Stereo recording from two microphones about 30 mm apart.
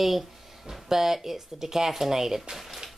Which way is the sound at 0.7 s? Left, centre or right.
Centre.